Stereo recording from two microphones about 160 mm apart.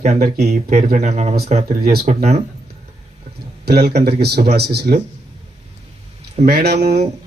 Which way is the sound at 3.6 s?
85° right.